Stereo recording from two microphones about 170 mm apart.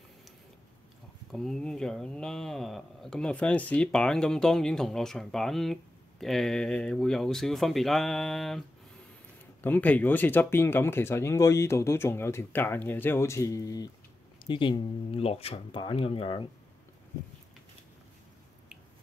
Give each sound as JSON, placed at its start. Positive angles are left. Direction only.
{"t": 1.3, "sound": "speech", "side_deg": 0}